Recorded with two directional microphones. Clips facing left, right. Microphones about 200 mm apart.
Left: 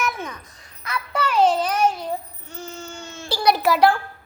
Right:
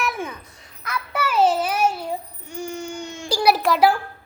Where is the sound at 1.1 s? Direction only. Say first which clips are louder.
Left 1 dB; 5° right (ahead or behind).